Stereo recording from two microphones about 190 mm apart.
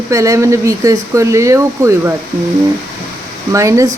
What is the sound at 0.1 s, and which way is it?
Speech, 15° right (ahead or behind).